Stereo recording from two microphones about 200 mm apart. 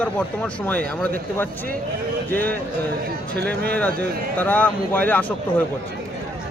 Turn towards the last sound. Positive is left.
turn(degrees=10)  # may be behind; listen again after turning